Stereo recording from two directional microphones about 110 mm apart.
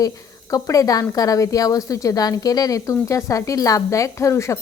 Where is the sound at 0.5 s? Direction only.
35° left (ahead or behind).